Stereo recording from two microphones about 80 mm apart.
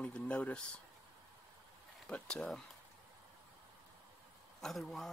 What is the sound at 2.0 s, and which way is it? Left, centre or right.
Speech, centre.